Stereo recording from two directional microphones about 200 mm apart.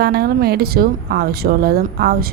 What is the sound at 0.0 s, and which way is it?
A woman's voice, 50° right (ahead or behind).